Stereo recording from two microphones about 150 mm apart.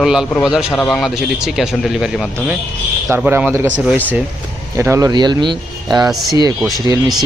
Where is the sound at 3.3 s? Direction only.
15° right (ahead or behind).